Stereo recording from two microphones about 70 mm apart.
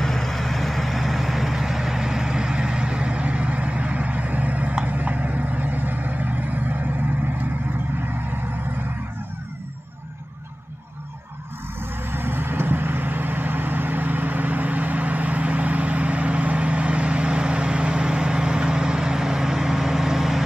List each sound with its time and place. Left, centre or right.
0.0 s vehicle: centre; by 6.9 s right
12.1 s vehicle: right; by 20.4 s centre